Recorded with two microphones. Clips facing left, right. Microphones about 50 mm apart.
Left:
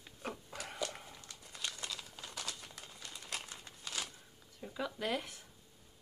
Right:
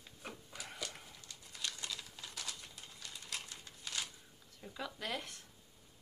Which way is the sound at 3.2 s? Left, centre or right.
Left.